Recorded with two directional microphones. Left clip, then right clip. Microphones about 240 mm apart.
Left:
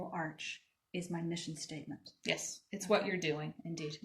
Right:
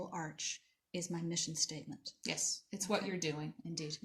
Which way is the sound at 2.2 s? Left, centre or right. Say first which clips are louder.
Left 2 dB; right.